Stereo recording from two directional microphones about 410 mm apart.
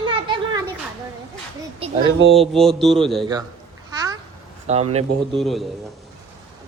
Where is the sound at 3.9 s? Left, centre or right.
Centre.